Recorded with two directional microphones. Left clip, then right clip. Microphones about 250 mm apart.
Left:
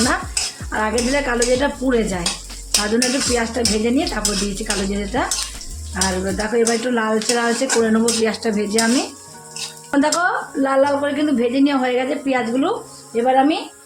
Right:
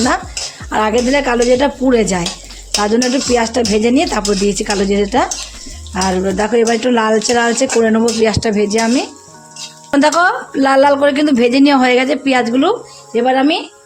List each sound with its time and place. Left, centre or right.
0.7 s a woman's voice: right
9.9 s a woman's voice: right